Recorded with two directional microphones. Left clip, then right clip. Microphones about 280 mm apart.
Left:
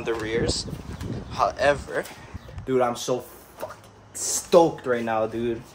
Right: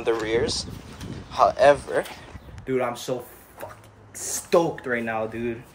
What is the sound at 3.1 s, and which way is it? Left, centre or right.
Speech, centre.